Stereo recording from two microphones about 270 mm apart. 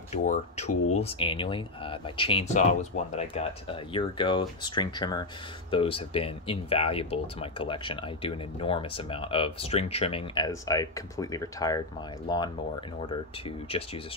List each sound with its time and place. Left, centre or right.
0.1 s speech: left